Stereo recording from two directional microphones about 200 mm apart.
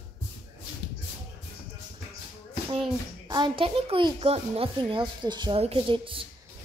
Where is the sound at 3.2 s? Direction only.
20° right (ahead or behind).